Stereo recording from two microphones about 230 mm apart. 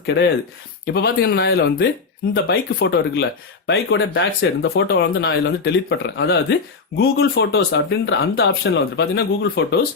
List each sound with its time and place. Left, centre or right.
0.0 s speech: left